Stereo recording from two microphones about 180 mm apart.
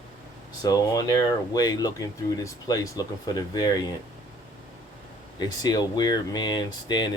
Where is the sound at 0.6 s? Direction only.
20° left (ahead or behind).